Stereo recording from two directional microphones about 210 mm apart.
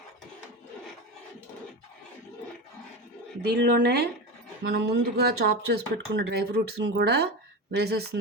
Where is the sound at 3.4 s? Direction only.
50° right (ahead or behind).